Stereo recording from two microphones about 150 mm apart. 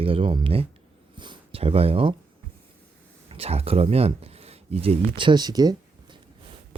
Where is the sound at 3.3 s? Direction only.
40° right (ahead or behind); by 6.2 s 25° right (ahead or behind).